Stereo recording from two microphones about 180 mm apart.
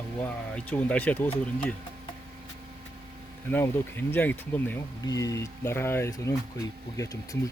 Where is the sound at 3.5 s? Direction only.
10° left (ahead or behind).